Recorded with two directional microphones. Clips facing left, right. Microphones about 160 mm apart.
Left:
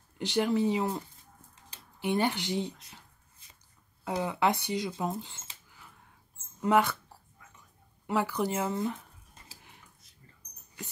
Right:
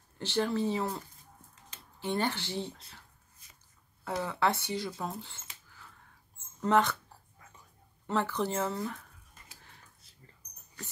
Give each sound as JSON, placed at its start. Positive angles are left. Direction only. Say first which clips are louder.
{"t": 0.2, "sound": "speech", "louder": "left 3 dB", "side_deg": 15}
{"t": 4.0, "sound": "speech", "louder": "left 2 dB", "side_deg": 15}
{"t": 8.1, "sound": "speech", "louder": "left 2 dB", "side_deg": 10}